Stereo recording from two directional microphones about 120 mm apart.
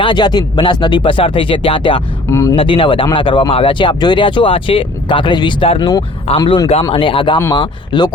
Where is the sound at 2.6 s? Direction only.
45° left (ahead or behind).